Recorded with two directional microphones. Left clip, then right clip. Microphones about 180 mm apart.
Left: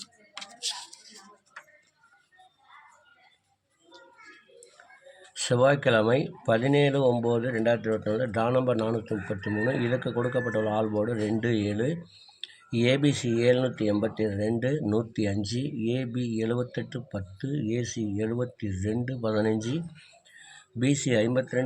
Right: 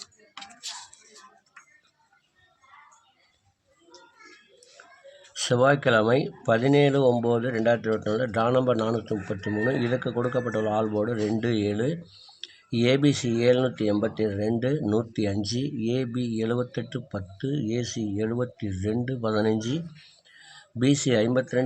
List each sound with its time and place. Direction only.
0.0 s music: centre (ahead or behind)
5.3 s speech: 10° right (ahead or behind)